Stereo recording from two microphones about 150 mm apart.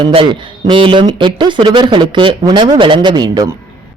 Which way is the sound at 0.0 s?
40° right (ahead or behind).